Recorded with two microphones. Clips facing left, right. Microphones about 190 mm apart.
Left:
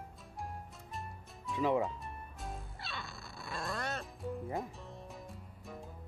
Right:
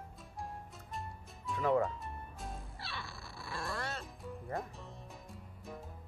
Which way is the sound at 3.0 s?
20° left (ahead or behind).